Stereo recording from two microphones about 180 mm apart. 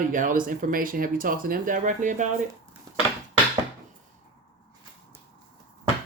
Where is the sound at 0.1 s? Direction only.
50° right (ahead or behind).